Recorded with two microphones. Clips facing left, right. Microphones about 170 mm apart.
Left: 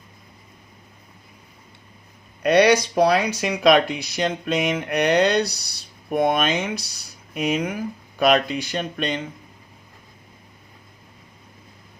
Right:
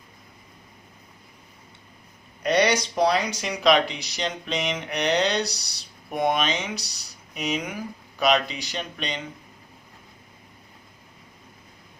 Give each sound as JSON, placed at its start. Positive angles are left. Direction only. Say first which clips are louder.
{"t": 2.4, "sound": "speech", "louder": "left 6 dB", "side_deg": 60}